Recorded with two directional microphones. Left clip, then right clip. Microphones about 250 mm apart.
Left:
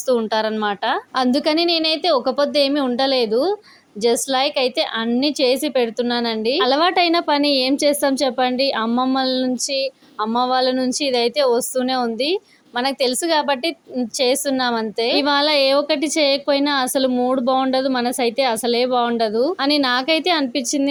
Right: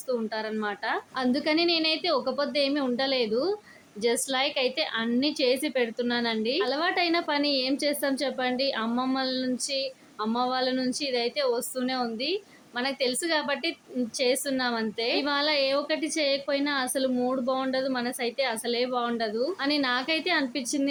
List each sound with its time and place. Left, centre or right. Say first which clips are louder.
0.1 s a woman's voice: left 11 dB; left